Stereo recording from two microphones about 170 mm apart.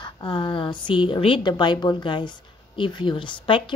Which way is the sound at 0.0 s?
25° left (ahead or behind).